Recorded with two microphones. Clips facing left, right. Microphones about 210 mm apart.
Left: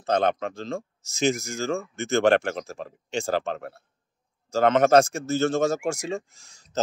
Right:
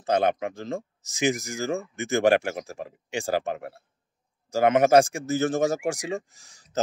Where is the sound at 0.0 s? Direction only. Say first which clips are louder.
Even; 10° right (ahead or behind).